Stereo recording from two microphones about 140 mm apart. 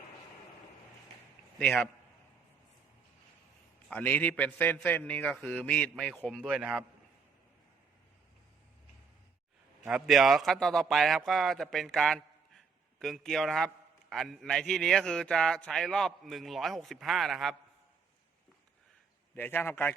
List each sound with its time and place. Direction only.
1.5 s a man's voice: 5° left (ahead or behind)
3.8 s a man's voice: 10° left (ahead or behind)
6.4 s a man's voice: 5° right (ahead or behind)
10.1 s a man's voice: centre (ahead or behind)
19.4 s a man's voice: 15° left (ahead or behind)